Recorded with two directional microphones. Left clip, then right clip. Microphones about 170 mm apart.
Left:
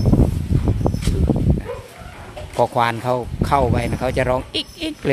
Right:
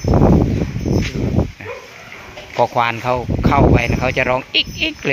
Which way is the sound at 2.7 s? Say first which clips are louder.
Right 2 dB; 10° left (ahead or behind).